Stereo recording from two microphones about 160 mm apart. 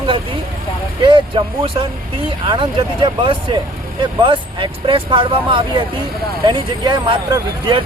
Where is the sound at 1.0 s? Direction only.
30° right (ahead or behind).